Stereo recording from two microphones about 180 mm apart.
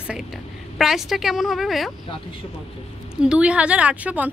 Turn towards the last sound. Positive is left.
turn(degrees=-10)  # may be behind; listen again after turning